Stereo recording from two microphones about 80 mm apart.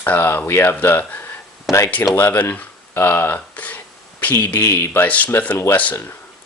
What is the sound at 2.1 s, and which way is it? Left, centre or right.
Speech, left.